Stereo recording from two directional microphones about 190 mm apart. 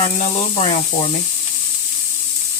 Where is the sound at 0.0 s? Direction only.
35° left (ahead or behind).